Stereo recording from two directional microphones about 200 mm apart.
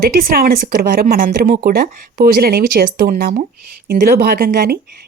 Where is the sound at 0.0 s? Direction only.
45° right (ahead or behind).